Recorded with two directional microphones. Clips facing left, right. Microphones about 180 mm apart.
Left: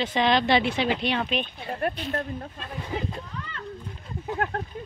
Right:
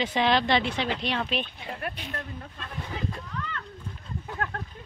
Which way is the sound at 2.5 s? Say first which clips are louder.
Left 1 dB; 25° left (ahead or behind).